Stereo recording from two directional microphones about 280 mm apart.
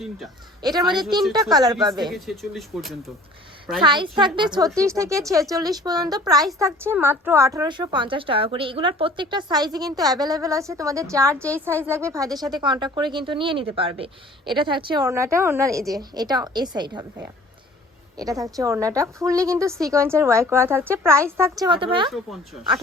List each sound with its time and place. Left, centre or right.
0.6 s a woman's voice: centre
2.0 s speech: centre
3.8 s a woman's voice: centre